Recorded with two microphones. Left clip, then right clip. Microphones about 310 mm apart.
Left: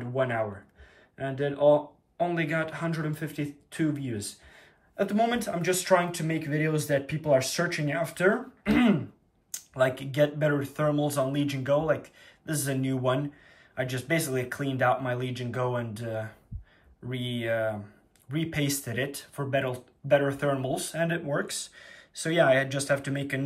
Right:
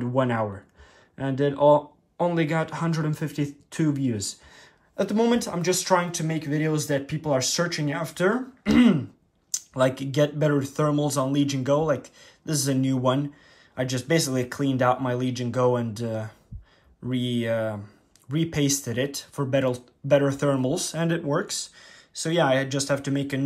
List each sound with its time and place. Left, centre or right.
0.1 s speech: centre